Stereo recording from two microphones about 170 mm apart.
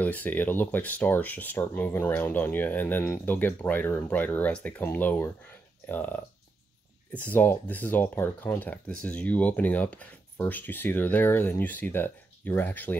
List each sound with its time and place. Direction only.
0.0 s speech: 10° left (ahead or behind)